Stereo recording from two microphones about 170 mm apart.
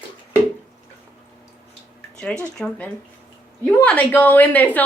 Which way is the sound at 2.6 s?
5° left (ahead or behind).